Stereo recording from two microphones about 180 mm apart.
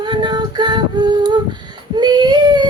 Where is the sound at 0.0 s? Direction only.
25° right (ahead or behind).